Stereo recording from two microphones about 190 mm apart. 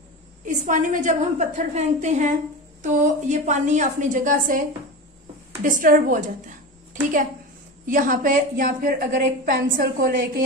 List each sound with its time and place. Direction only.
0.5 s a woman's voice: 40° right (ahead or behind)